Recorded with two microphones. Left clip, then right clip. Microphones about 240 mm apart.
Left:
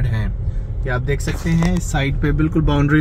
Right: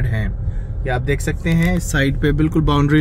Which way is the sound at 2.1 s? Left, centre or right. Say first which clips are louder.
Right 2 dB; right.